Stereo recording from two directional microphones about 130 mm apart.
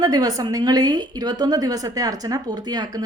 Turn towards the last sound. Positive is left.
turn(degrees=-30)  # may be behind; listen again after turning